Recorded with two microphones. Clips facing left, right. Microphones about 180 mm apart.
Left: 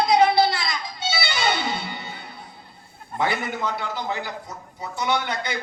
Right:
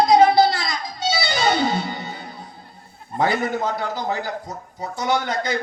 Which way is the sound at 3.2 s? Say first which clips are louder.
Right 4 dB; 45° right (ahead or behind).